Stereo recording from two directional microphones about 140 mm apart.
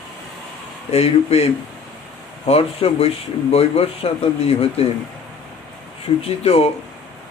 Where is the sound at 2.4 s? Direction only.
45° left (ahead or behind).